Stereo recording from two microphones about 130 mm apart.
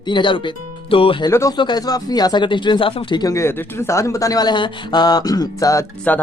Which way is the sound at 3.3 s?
20° left (ahead or behind).